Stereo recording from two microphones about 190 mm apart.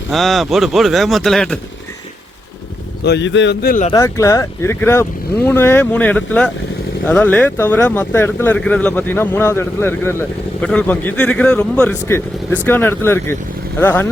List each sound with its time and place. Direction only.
0.1 s speech: centre (ahead or behind)
3.0 s speech: 65° left (ahead or behind)
3.9 s speech: 15° left (ahead or behind)